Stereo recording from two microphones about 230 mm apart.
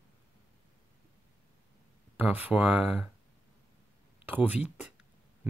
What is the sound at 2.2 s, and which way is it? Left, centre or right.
Speech, centre.